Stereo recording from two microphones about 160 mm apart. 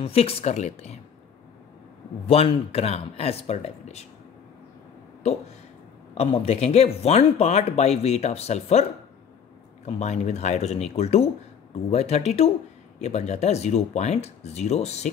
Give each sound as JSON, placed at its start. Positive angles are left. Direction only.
{"t": 0.0, "sound": "speech", "side_deg": 40}
{"t": 2.2, "sound": "speech", "side_deg": 40}
{"t": 5.2, "sound": "speech", "side_deg": 40}
{"t": 9.8, "sound": "speech", "side_deg": 45}